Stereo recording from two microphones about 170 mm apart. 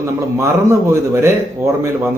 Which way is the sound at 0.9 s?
15° right (ahead or behind).